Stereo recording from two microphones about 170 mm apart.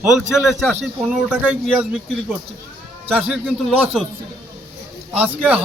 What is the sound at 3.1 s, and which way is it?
Speech, 5° right (ahead or behind).